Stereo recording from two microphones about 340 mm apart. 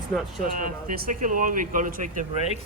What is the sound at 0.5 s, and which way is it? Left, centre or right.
Speech, right.